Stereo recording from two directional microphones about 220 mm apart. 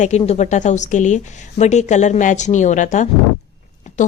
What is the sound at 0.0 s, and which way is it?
A woman's voice, 30° left (ahead or behind).